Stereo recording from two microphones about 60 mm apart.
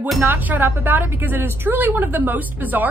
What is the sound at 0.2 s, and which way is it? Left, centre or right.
A woman's voice, right.